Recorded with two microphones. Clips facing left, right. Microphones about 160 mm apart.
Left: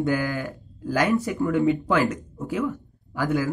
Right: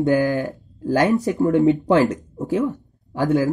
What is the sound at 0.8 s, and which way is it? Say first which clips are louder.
Speech: right 4 dB; 40° right (ahead or behind).